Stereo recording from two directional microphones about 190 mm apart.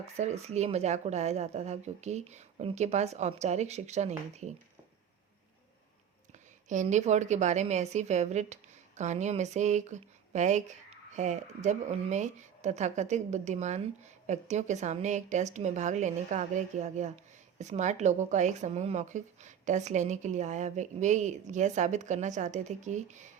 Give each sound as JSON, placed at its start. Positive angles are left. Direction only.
{"t": 0.2, "sound": "a woman's voice", "side_deg": -35}
{"t": 6.3, "sound": "a woman's voice", "side_deg": -40}